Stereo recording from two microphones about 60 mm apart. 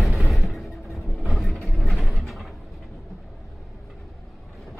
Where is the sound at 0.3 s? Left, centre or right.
Centre.